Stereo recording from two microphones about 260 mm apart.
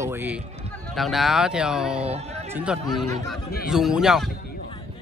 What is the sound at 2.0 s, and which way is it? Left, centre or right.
Speech, right.